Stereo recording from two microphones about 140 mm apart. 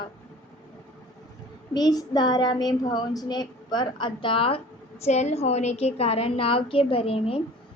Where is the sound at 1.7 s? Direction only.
30° left (ahead or behind).